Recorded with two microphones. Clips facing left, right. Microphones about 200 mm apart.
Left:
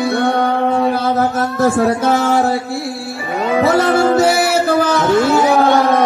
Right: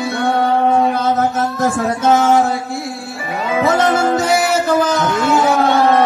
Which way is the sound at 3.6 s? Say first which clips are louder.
Left 1 dB; 35° left (ahead or behind).